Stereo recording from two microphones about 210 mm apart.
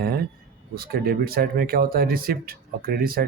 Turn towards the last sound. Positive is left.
turn(degrees=-45)  # may be behind; listen again after turning